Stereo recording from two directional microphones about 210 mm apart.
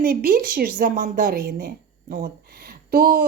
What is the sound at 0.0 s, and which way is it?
A woman's voice, 40° right (ahead or behind).